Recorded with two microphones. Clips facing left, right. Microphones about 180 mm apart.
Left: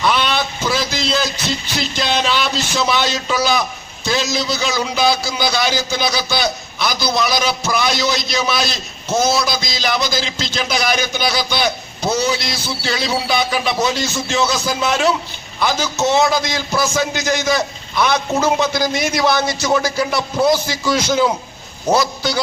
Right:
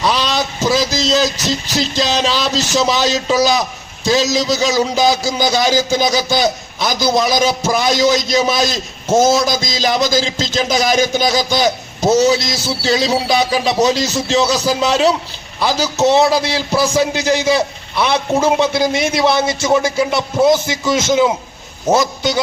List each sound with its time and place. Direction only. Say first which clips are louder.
0.0 s a man's voice: right 1 dB; 35° right (ahead or behind); by 22.4 s 20° right (ahead or behind)